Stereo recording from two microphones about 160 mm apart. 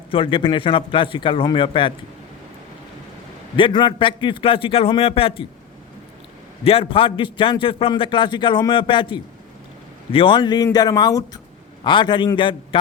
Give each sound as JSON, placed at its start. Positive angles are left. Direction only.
{"t": 0.1, "sound": "a man's voice", "side_deg": 30}
{"t": 3.5, "sound": "a man's voice", "side_deg": 30}
{"t": 6.7, "sound": "a man's voice", "side_deg": 35}